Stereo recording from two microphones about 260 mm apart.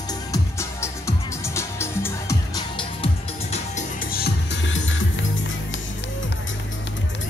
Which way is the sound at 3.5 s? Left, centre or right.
Left.